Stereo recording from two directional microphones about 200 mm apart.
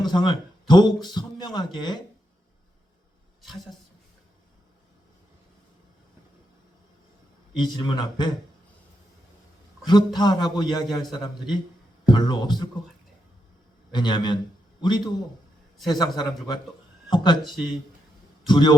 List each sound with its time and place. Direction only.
0.0 s a man's voice: 20° left (ahead or behind)
3.4 s speech: centre (ahead or behind)
7.5 s a man's voice: 20° left (ahead or behind)
9.8 s a man's voice: 20° left (ahead or behind)
13.9 s a man's voice: 20° left (ahead or behind)
18.4 s a man's voice: 20° left (ahead or behind)